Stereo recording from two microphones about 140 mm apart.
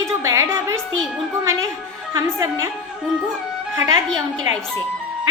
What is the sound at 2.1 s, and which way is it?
Speech, 20° right (ahead or behind).